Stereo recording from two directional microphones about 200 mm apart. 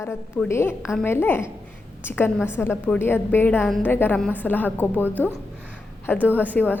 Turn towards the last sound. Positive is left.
turn(degrees=10)  # may be behind; listen again after turning